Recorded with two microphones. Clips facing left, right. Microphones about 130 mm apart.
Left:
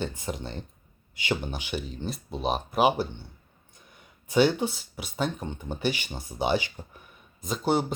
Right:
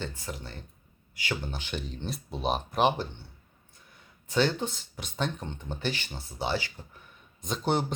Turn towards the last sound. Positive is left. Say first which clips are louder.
# left 3 dB
turn(degrees=5)  # may be behind; listen again after turning